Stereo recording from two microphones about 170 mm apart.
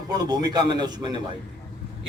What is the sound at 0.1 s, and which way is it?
A man's voice, 25° right (ahead or behind).